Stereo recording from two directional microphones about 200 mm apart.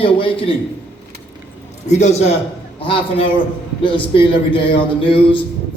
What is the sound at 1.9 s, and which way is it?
A man's voice, 35° left (ahead or behind).